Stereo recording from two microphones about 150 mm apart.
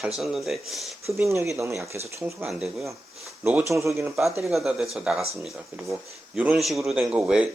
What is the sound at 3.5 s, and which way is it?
Speech, 15° right (ahead or behind).